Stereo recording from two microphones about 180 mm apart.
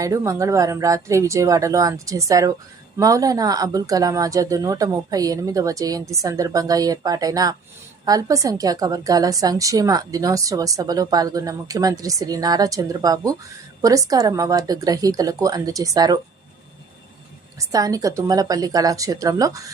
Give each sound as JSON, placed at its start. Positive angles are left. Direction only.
{"t": 0.0, "sound": "a woman's voice", "side_deg": -20}
{"t": 17.6, "sound": "a woman's voice", "side_deg": -20}